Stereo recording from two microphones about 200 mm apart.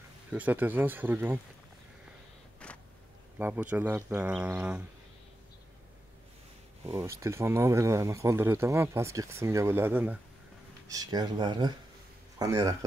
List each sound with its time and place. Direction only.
0.3 s speech: 10° right (ahead or behind)
2.6 s a sound: 5° left (ahead or behind)
3.3 s speech: 10° right (ahead or behind)
6.9 s speech: 15° right (ahead or behind)